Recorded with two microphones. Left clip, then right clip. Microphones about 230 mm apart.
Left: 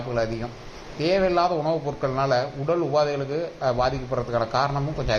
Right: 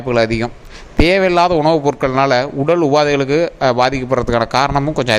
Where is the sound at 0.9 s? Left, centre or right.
Right.